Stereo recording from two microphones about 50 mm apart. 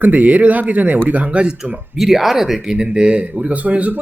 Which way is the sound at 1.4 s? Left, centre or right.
Centre.